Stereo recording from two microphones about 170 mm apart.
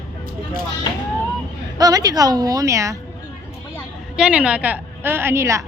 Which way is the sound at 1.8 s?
20° right (ahead or behind).